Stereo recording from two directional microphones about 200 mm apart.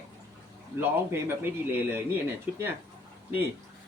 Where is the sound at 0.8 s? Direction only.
10° right (ahead or behind).